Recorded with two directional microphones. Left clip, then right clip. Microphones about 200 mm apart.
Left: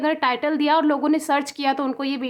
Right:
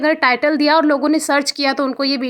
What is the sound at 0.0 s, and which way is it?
A woman's voice, 20° right (ahead or behind).